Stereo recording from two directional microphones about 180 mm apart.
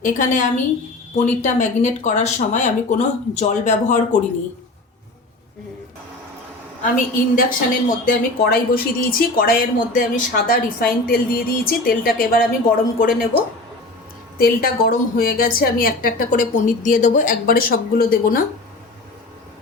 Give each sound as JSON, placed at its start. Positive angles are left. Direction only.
{"t": 0.0, "sound": "a woman's voice", "side_deg": 45}
{"t": 6.8, "sound": "a woman's voice", "side_deg": 50}